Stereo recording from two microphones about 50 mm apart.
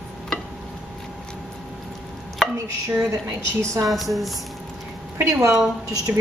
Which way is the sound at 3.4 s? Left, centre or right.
Right.